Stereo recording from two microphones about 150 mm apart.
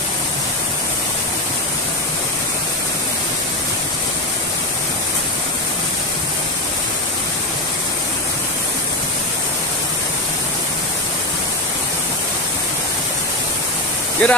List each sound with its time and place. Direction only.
14.2 s speech: 5° left (ahead or behind)